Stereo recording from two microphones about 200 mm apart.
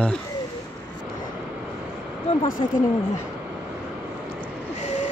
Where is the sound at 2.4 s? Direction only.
45° left (ahead or behind).